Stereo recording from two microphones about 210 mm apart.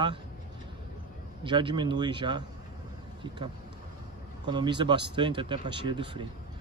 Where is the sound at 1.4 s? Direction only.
25° right (ahead or behind).